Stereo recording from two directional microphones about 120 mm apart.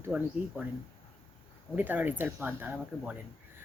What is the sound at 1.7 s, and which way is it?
Speech, 15° right (ahead or behind).